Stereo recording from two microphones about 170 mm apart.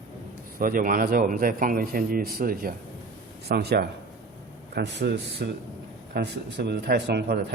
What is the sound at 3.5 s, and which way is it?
Speech, 70° right (ahead or behind).